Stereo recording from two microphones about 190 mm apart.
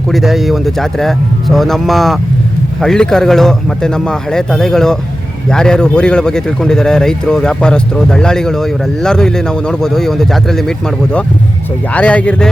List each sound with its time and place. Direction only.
0.1 s speech: centre (ahead or behind)